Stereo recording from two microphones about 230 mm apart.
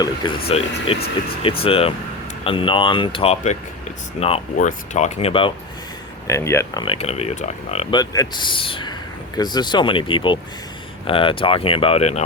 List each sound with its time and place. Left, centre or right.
0.0 s speech: centre
6.2 s speech: centre